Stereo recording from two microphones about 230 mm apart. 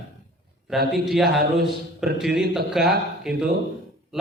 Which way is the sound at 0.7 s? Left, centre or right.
Centre.